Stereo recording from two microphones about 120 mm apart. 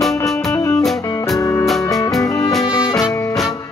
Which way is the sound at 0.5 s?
25° left (ahead or behind).